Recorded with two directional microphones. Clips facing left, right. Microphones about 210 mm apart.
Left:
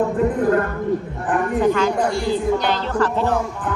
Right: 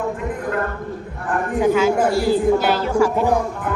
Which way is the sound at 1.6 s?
5° right (ahead or behind).